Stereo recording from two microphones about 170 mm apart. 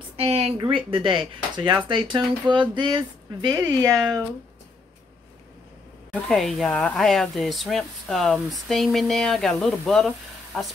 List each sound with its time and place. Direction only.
0.2 s speech: 40° right (ahead or behind); by 3.9 s 20° right (ahead or behind)
6.2 s speech: centre (ahead or behind)